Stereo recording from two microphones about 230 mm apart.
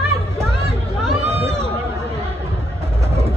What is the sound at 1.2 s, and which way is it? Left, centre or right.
Run, right.